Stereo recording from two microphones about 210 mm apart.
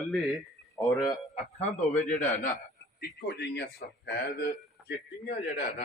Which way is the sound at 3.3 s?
55° left (ahead or behind).